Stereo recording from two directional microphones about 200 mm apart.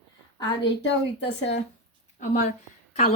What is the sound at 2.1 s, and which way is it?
Speech, 40° left (ahead or behind).